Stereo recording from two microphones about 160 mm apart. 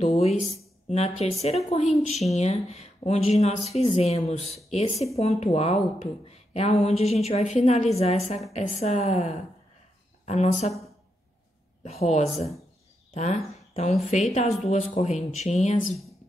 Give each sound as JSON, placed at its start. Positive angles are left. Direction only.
{"t": 0.0, "sound": "a woman's voice", "side_deg": 45}
{"t": 11.8, "sound": "a woman's voice", "side_deg": 45}